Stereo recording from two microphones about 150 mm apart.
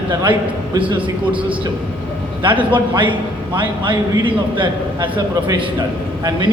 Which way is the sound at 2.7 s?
35° right (ahead or behind).